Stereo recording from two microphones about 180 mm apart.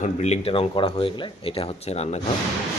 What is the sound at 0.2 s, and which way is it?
Speech, 35° left (ahead or behind).